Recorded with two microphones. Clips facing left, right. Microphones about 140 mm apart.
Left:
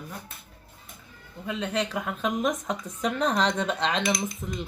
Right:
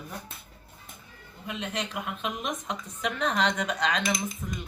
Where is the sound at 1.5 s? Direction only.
35° left (ahead or behind).